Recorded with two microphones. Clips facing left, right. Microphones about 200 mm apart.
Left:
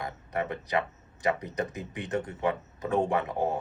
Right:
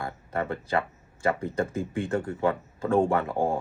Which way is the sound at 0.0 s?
20° left (ahead or behind).